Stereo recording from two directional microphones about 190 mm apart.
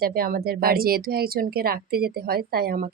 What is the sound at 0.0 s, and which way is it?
Speech, 50° right (ahead or behind).